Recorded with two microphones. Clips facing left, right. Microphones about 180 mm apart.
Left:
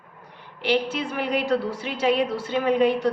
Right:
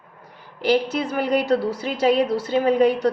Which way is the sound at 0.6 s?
40° right (ahead or behind).